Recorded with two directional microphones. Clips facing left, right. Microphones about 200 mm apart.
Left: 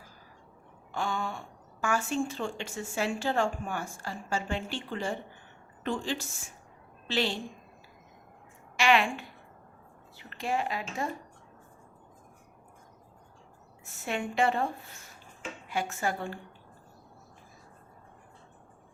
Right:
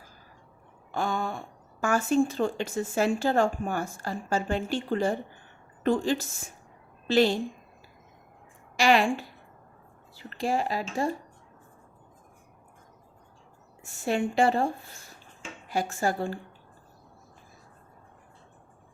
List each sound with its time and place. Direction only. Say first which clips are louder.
0.9 s a sound: right 3 dB; 40° right (ahead or behind)
1.8 s a woman's voice: right 6 dB; 40° right (ahead or behind)
8.7 s a woman's voice: right 3 dB; 35° right (ahead or behind)
14.0 s a woman's voice: right 5 dB; 35° right (ahead or behind)